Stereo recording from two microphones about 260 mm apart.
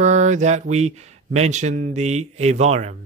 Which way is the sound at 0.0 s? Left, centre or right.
Right.